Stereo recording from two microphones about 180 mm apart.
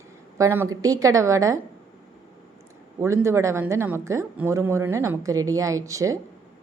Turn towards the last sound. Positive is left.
turn(degrees=-15)  # may be behind; listen again after turning